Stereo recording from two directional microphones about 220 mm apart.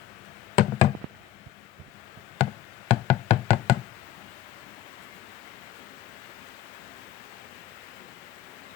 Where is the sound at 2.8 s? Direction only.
30° left (ahead or behind).